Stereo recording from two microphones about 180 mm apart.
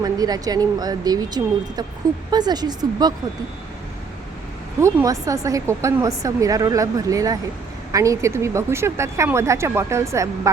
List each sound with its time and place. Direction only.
0.0 s speech: 20° right (ahead or behind)
4.8 s a woman's voice: 15° right (ahead or behind)